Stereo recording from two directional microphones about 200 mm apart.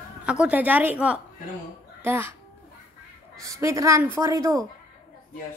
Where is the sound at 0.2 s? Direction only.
5° right (ahead or behind).